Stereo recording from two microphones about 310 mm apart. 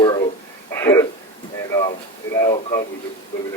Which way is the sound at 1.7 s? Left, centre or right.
Centre.